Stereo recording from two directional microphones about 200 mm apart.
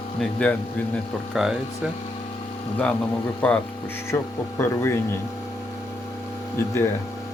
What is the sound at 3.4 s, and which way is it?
Speech, 5° left (ahead or behind).